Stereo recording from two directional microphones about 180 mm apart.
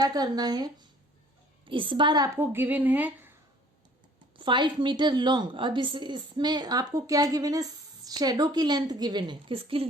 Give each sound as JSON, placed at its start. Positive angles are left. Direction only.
{"t": 0.0, "sound": "a woman's voice", "side_deg": -20}
{"t": 4.4, "sound": "a woman's voice", "side_deg": -25}